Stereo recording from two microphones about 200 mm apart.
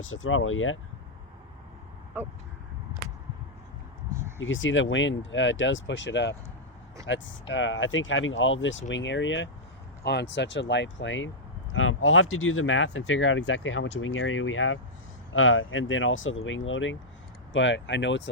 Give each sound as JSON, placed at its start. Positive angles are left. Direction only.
{"t": 0.0, "sound": "speech", "side_deg": 80}
{"t": 4.4, "sound": "speech", "side_deg": 75}
{"t": 11.7, "sound": "speech", "side_deg": 85}